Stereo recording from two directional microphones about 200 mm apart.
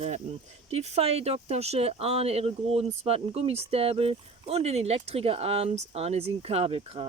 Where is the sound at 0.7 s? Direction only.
30° right (ahead or behind).